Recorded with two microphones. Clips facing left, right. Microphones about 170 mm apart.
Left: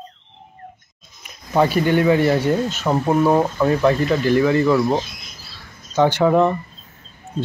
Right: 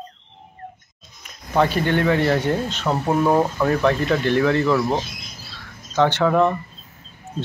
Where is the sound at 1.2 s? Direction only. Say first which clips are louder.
Left 2 dB; 10° left (ahead or behind).